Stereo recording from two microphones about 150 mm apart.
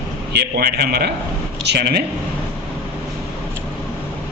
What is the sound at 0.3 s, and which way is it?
A man's voice, 90° right.